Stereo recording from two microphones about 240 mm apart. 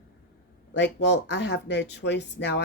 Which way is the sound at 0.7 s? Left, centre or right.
Left.